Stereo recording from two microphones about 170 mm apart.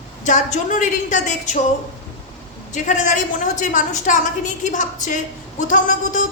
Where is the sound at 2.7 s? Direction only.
45° left (ahead or behind).